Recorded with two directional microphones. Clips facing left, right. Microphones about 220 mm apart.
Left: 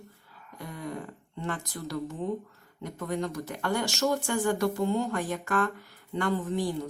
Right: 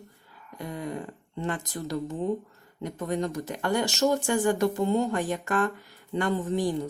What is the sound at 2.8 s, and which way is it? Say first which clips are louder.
Speech: right 3 dB; 20° right (ahead or behind).